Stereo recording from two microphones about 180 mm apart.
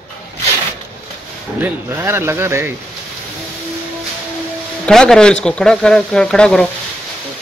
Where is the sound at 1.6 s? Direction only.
15° right (ahead or behind).